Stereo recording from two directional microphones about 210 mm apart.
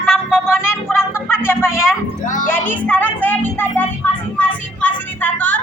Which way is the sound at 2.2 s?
40° left (ahead or behind).